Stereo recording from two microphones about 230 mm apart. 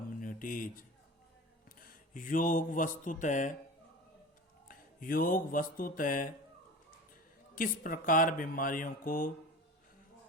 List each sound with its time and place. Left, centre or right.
0.2 s a sound: left
2.1 s speech: left
4.7 s speech: left
7.5 s speech: left